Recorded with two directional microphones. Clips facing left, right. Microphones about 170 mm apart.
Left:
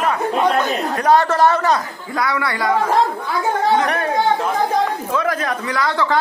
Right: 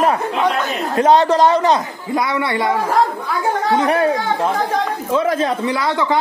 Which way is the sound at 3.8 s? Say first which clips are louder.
Right 4 dB; 25° right (ahead or behind).